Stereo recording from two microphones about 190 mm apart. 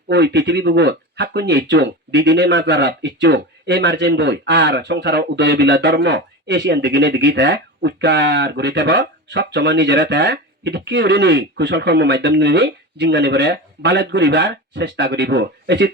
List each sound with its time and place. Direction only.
0.1 s speech: 65° right (ahead or behind)